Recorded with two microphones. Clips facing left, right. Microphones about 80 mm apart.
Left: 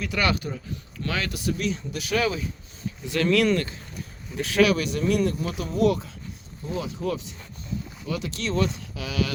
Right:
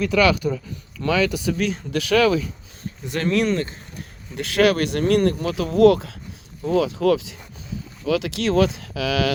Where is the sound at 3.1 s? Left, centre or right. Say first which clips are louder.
Even; right.